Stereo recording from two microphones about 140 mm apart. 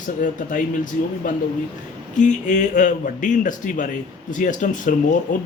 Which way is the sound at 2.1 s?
60° left (ahead or behind).